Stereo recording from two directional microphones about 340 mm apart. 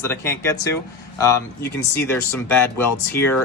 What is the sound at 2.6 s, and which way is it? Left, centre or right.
Speech, centre.